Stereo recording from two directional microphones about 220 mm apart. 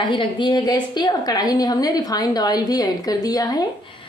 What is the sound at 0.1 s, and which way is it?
A woman's voice, 20° left (ahead or behind).